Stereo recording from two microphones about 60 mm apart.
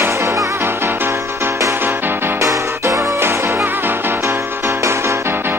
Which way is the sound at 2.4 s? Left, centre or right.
Right.